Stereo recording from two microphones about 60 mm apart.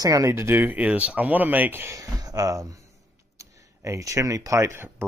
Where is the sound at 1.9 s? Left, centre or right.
Right.